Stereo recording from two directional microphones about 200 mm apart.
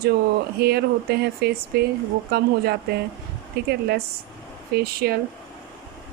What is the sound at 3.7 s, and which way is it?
Speech, 55° right (ahead or behind).